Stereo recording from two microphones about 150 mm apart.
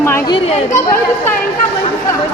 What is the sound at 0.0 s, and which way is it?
Chatter, 15° left (ahead or behind).